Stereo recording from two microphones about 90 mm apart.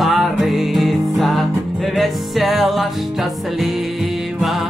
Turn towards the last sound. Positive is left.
turn(degrees=0)  # may be behind; listen again after turning